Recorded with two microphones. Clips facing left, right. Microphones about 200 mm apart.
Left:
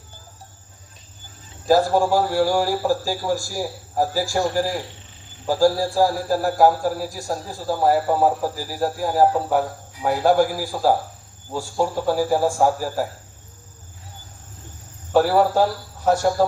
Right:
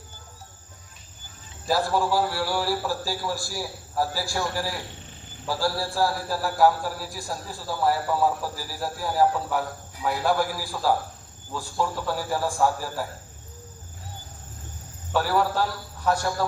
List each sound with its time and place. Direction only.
1.6 s a man's voice: 45° left (ahead or behind)
15.3 s speech: 40° left (ahead or behind)